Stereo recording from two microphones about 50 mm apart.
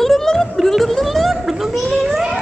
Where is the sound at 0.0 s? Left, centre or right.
Centre.